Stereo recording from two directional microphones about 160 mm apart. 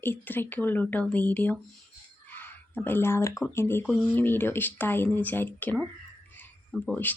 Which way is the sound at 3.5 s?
15° left (ahead or behind).